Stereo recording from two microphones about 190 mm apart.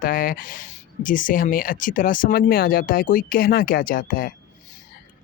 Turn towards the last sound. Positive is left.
turn(degrees=50)  # may be behind; listen again after turning